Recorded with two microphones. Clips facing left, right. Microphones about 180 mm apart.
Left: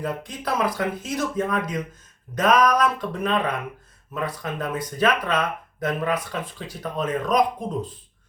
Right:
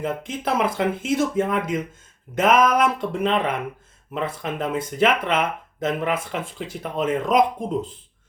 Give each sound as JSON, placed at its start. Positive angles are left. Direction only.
{"t": 0.0, "sound": "speech", "side_deg": -25}